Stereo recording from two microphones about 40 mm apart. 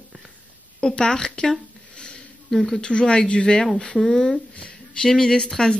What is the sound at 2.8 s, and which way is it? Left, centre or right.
Speech, left.